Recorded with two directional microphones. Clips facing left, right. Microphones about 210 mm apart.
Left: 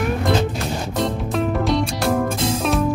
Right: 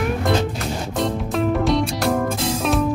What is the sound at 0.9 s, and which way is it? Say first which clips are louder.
Music: even; centre (ahead or behind).